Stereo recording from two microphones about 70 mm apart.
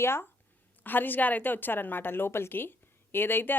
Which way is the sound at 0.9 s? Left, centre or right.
Left.